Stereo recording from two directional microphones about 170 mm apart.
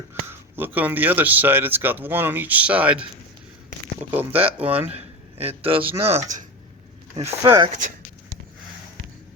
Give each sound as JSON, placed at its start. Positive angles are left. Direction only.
{"t": 0.1, "sound": "speech", "side_deg": -10}
{"t": 4.1, "sound": "speech", "side_deg": -10}
{"t": 4.8, "sound": "a man's voice", "side_deg": -40}
{"t": 7.2, "sound": "speech", "side_deg": -20}